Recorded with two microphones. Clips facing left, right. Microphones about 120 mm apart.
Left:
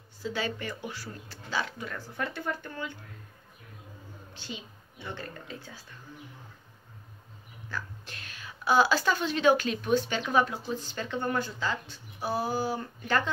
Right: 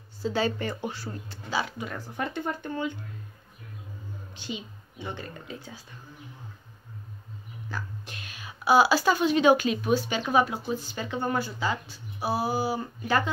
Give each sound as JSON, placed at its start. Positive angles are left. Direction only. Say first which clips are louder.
{"t": 0.2, "sound": "speech", "louder": "right 6 dB", "side_deg": -30}
{"t": 1.5, "sound": "speech", "louder": "right 3 dB", "side_deg": -10}
{"t": 4.4, "sound": "speech", "louder": "right 5 dB", "side_deg": -15}
{"t": 7.7, "sound": "a woman's voice", "louder": "right 1 dB", "side_deg": -15}